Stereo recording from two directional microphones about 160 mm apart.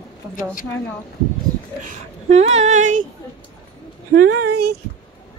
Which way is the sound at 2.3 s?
45° right (ahead or behind).